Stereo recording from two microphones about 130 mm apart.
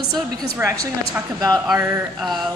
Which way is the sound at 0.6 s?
20° right (ahead or behind).